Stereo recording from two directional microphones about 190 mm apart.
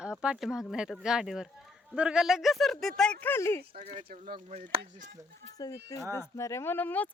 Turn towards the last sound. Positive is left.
turn(degrees=10)  # may be behind; listen again after turning